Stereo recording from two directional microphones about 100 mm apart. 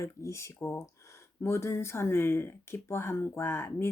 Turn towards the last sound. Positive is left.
turn(degrees=25)  # may be behind; listen again after turning